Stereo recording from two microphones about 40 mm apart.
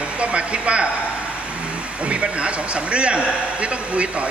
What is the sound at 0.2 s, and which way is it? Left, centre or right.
Speech, right.